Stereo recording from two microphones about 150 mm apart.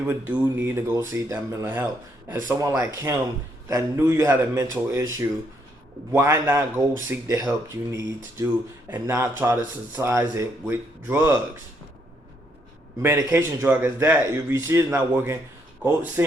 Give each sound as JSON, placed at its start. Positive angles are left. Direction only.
{"t": 0.1, "sound": "speech", "side_deg": -15}
{"t": 13.0, "sound": "speech", "side_deg": -15}